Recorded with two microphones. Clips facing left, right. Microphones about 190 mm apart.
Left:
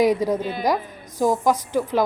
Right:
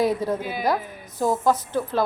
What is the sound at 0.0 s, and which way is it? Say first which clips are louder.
A woman's voice: left 4 dB; 15° left (ahead or behind).